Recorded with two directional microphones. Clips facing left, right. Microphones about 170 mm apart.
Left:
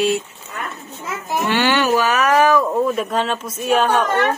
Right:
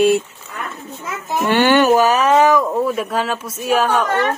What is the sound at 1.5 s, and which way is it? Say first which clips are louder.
Speech: right 5 dB; 50° right (ahead or behind).